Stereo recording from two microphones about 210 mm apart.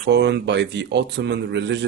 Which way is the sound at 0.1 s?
55° right (ahead or behind).